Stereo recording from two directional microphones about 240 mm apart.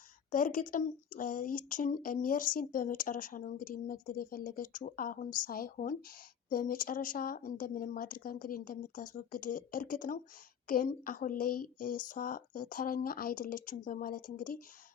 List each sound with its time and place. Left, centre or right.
0.3 s speech: left